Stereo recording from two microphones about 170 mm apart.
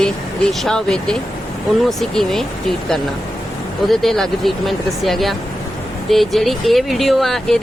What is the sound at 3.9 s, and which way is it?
Speech, centre (ahead or behind).